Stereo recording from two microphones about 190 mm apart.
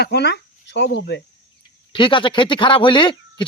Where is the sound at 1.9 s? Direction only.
25° left (ahead or behind).